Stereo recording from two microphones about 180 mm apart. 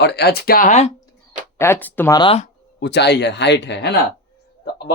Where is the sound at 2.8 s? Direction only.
70° left (ahead or behind).